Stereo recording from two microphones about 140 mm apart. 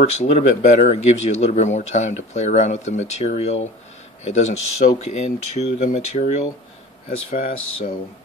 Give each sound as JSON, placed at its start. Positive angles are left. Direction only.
{"t": 0.2, "sound": "speech", "side_deg": 60}
{"t": 7.2, "sound": "speech", "side_deg": 90}